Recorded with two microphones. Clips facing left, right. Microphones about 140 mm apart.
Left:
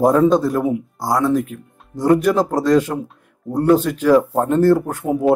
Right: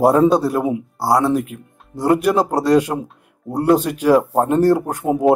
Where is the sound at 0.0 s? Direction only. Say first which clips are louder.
Even; 10° right (ahead or behind).